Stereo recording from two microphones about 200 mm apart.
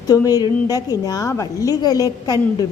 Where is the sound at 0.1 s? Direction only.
20° left (ahead or behind).